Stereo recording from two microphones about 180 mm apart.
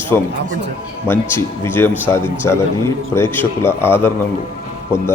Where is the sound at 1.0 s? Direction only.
15° left (ahead or behind).